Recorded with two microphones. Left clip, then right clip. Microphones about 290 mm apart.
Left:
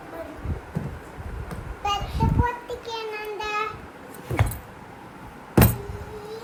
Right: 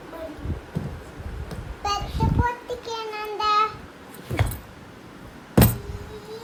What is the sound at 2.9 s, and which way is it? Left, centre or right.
Child singing, right.